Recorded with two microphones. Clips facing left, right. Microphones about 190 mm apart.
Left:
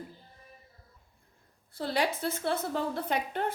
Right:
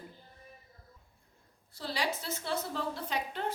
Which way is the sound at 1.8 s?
55° left (ahead or behind).